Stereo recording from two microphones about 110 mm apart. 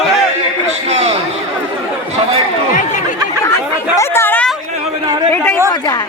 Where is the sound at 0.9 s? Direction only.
70° right (ahead or behind).